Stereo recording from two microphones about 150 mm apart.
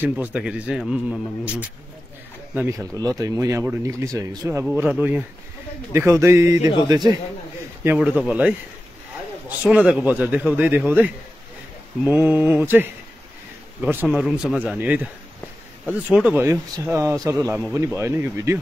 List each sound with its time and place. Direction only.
0.0 s speech: 10° right (ahead or behind)
4.8 s speech: 10° right (ahead or behind); by 7.2 s 25° right (ahead or behind)
7.8 s speech: 10° right (ahead or behind)
9.6 s speech: 5° right (ahead or behind)
12.0 s speech: 10° right (ahead or behind)
14.0 s speech: 5° right (ahead or behind)